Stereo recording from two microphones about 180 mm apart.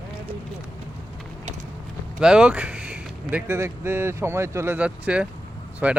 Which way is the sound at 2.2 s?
5° right (ahead or behind).